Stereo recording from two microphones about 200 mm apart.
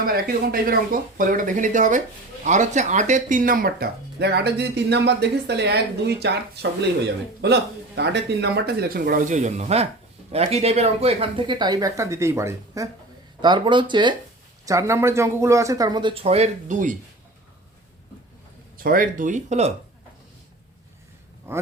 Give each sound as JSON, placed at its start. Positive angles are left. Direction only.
{"t": 0.0, "sound": "speech", "side_deg": -50}
{"t": 18.8, "sound": "speech", "side_deg": -45}
{"t": 21.5, "sound": "speech", "side_deg": -10}